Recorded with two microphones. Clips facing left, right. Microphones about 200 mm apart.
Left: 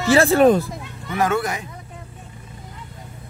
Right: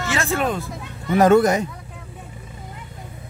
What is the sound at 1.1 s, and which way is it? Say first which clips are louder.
Speech: right 7 dB; 40° right (ahead or behind).